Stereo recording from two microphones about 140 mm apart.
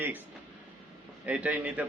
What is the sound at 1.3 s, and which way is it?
Speech, 10° right (ahead or behind).